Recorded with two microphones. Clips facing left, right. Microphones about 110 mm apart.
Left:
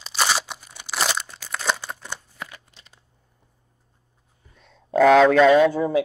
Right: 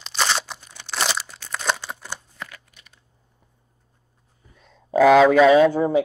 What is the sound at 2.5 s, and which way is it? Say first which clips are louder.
Crumpling: even; 25° left (ahead or behind).